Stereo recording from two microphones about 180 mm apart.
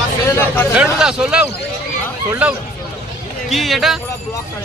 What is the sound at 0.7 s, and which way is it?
Speech, 5° right (ahead or behind).